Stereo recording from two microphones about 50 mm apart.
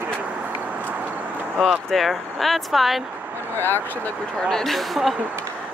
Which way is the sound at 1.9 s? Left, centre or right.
Centre.